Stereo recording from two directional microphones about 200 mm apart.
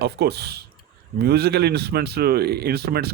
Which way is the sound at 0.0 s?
55° right (ahead or behind).